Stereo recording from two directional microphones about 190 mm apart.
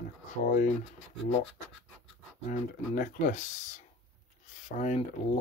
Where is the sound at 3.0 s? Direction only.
45° left (ahead or behind).